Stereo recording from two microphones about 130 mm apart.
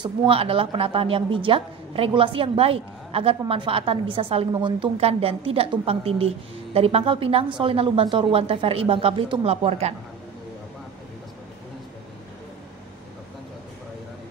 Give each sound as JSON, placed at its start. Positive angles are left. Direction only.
{"t": 0.0, "sound": "a woman's voice", "side_deg": -40}